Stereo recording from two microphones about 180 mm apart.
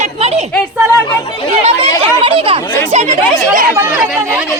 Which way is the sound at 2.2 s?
30° right (ahead or behind).